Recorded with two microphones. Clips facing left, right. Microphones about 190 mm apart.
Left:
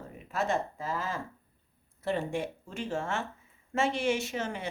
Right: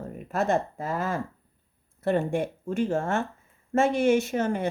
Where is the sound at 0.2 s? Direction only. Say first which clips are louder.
Right 5 dB; 50° right (ahead or behind).